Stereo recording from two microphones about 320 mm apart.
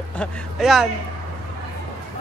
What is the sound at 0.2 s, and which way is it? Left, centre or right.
Speech, centre.